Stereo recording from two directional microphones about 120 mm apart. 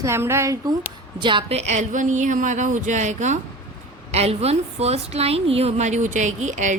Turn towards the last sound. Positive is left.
turn(degrees=-90)